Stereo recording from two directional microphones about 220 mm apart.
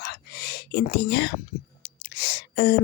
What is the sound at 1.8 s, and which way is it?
Whispering, 50° left (ahead or behind).